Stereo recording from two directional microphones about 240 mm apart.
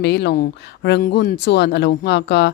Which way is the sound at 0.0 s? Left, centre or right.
Left.